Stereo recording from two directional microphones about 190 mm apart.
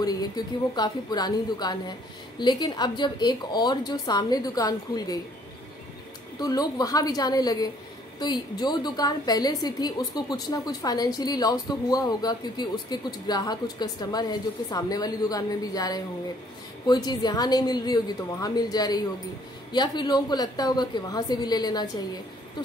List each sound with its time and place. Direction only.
0.0 s speech: 20° left (ahead or behind)
6.4 s speech: 20° left (ahead or behind)